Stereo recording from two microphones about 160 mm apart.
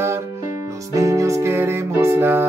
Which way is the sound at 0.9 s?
20° right (ahead or behind).